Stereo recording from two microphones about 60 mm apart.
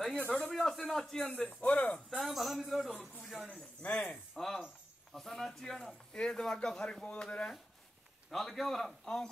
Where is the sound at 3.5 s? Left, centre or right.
Centre.